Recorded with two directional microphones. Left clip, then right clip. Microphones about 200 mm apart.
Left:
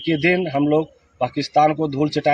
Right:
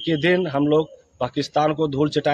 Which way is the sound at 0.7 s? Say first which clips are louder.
Even; 15° right (ahead or behind).